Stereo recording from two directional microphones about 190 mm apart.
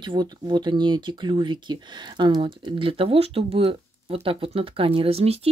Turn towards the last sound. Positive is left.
turn(degrees=-30)  # may be behind; listen again after turning